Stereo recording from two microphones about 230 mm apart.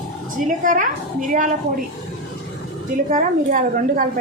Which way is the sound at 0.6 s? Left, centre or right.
Right.